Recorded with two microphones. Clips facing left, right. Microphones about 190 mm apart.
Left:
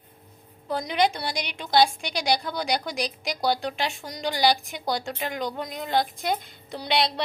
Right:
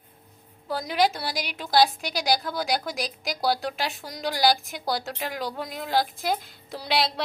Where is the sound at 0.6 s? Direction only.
Centre (ahead or behind).